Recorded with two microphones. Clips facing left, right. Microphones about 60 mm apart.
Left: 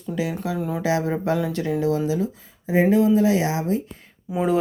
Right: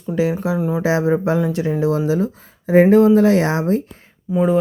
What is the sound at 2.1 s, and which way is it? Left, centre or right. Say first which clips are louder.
Speech: right 5 dB; right.